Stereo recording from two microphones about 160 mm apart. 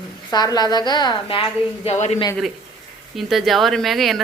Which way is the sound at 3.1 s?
Centre (ahead or behind).